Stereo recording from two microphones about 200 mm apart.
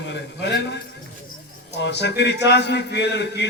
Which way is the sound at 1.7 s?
60° left (ahead or behind).